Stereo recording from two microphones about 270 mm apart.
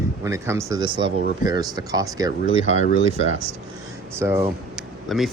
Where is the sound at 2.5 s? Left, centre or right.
Left.